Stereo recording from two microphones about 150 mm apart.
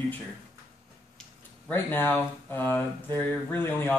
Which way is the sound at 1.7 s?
15° left (ahead or behind).